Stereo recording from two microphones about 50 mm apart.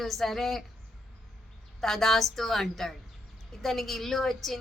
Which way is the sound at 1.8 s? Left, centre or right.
Centre.